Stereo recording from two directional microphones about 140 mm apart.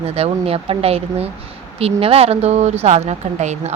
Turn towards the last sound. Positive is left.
turn(degrees=-55)  # may be behind; listen again after turning